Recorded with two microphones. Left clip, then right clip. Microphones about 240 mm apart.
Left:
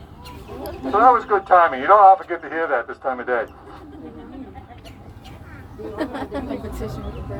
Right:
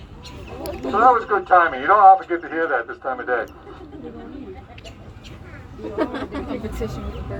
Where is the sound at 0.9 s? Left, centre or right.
Left.